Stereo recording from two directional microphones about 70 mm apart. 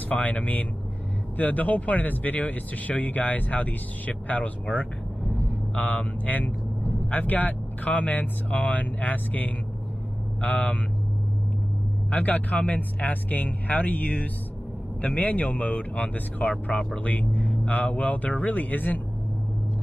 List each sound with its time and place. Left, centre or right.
0.1 s speech: left
12.1 s speech: left